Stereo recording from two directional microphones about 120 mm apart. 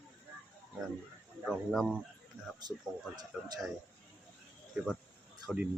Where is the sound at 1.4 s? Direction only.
Centre (ahead or behind).